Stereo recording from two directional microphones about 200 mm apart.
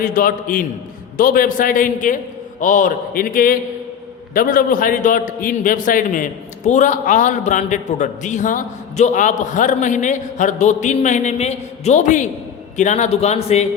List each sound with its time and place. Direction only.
0.0 s a man's voice: 45° left (ahead or behind)